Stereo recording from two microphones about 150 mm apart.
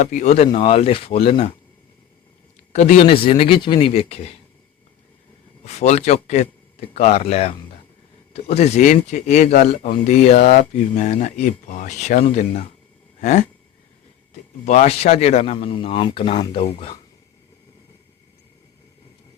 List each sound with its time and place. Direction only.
0.0 s speech: 55° left (ahead or behind); by 1.5 s 40° left (ahead or behind)
2.7 s speech: 50° left (ahead or behind)
5.6 s speech: 45° left (ahead or behind)
14.6 s speech: 50° left (ahead or behind)